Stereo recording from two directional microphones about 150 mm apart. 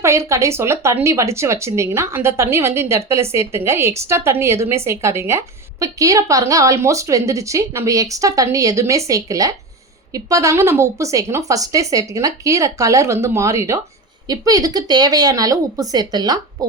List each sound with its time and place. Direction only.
0.0 s a woman's voice: 20° right (ahead or behind)